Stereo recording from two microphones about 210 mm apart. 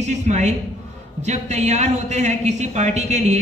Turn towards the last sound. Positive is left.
turn(degrees=-35)  # may be behind; listen again after turning